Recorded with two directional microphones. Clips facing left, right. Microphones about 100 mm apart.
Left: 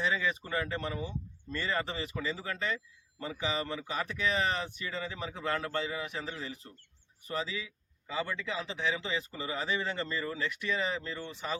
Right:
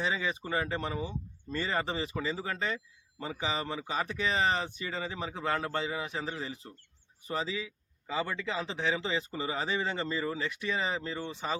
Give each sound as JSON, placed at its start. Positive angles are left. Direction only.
{"t": 0.0, "sound": "speech", "side_deg": -25}